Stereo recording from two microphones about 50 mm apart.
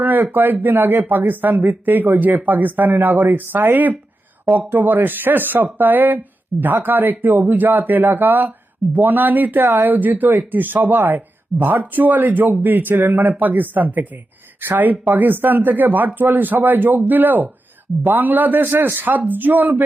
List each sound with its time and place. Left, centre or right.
0.0 s speech: right